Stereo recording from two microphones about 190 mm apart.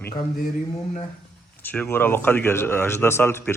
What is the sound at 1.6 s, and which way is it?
A man's voice, 10° left (ahead or behind).